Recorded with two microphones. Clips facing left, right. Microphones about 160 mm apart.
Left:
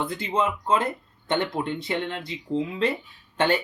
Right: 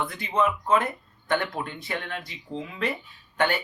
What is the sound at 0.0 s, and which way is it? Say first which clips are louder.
Speech: even; 20° left (ahead or behind).